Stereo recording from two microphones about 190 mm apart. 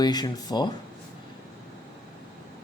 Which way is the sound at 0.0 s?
20° left (ahead or behind).